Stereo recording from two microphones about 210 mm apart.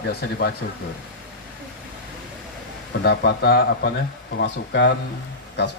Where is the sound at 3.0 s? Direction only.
50° left (ahead or behind).